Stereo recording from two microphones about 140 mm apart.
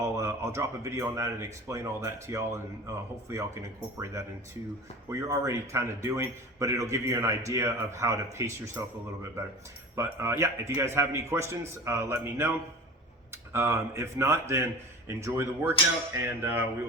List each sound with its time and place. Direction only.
0.0 s a man's voice: 20° right (ahead or behind)
9.9 s a man's voice: 20° right (ahead or behind)
16.1 s a sound: 15° right (ahead or behind)